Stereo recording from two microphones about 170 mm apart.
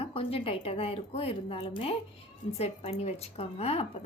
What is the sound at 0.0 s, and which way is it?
A woman's voice, 35° left (ahead or behind).